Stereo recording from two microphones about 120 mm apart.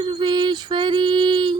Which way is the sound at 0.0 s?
40° right (ahead or behind).